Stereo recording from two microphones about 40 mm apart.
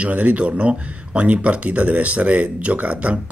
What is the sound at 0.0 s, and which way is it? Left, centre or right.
Speech, right.